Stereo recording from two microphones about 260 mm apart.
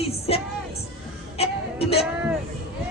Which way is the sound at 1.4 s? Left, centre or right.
Left.